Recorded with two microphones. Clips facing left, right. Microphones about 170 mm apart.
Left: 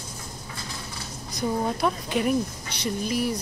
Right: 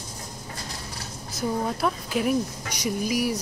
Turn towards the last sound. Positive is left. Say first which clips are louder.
# right 1 dB
turn(degrees=-10)  # may be behind; listen again after turning